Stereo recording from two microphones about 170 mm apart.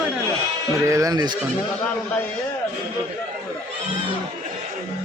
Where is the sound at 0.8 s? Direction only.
20° right (ahead or behind).